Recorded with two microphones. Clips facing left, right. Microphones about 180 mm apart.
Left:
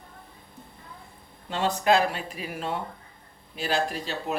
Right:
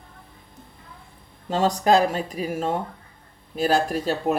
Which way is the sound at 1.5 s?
40° right (ahead or behind).